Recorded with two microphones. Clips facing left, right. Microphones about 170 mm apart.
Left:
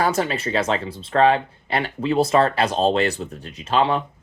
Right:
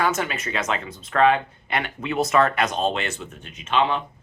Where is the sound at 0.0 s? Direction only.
35° left (ahead or behind).